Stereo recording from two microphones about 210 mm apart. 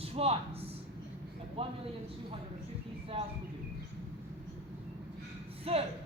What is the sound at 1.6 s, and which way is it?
Speech, 25° right (ahead or behind).